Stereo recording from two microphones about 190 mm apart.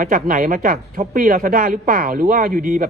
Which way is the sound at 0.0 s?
45° right (ahead or behind).